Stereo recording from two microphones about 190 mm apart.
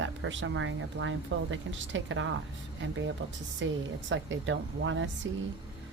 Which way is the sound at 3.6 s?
75° right (ahead or behind).